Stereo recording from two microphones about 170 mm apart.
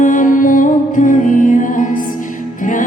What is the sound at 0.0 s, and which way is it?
Music, 50° left (ahead or behind).